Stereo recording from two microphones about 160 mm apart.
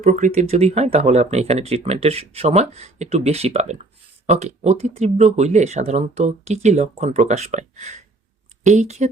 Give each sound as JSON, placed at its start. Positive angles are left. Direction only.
{"t": 0.0, "sound": "speech", "side_deg": -50}